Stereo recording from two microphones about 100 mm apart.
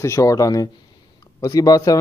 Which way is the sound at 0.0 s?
30° left (ahead or behind).